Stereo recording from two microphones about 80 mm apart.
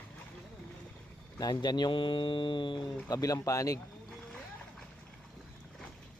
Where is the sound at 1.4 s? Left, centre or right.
Left.